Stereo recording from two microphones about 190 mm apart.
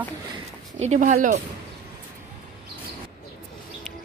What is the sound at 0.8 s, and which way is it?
Speech, 40° right (ahead or behind).